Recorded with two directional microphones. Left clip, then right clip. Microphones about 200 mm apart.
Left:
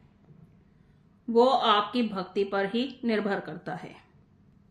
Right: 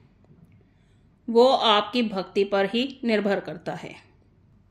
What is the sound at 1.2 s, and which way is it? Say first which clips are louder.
Speech: right 4 dB; 35° right (ahead or behind).